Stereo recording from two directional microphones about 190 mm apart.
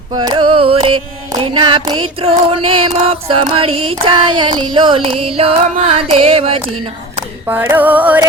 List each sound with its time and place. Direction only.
0.2 s music: 25° right (ahead or behind)
7.4 s music: 10° right (ahead or behind)